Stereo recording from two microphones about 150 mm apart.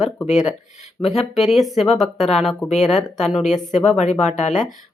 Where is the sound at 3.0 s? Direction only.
50° left (ahead or behind).